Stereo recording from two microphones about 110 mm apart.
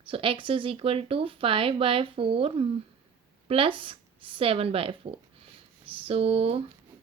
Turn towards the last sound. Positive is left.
turn(degrees=-60)  # may be behind; listen again after turning